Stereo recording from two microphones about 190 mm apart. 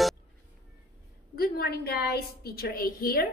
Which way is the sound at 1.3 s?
55° left (ahead or behind).